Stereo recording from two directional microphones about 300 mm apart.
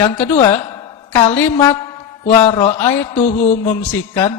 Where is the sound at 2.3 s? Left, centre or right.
Centre.